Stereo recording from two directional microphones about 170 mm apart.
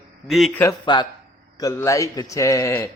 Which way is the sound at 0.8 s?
25° left (ahead or behind).